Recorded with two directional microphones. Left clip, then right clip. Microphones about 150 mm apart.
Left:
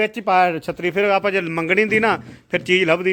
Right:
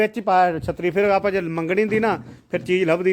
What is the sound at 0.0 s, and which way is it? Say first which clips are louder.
Speech: even; 20° right (ahead or behind).